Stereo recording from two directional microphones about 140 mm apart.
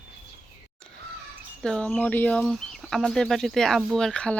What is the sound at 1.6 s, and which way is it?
Speech, 5° left (ahead or behind).